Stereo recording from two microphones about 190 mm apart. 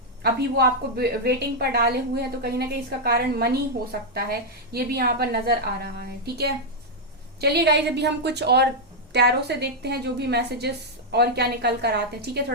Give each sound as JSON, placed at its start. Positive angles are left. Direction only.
{"t": 0.2, "sound": "a woman's voice", "side_deg": -55}